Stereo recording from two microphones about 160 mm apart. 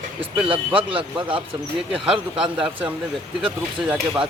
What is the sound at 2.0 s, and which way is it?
Speech, 5° right (ahead or behind).